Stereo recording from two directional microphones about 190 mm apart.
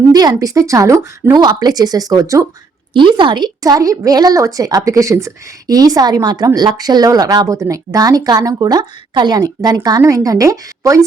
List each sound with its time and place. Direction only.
0.1 s a woman's voice: 20° right (ahead or behind)